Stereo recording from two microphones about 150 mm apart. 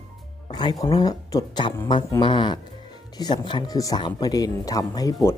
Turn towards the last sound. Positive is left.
turn(degrees=20)  # may be behind; listen again after turning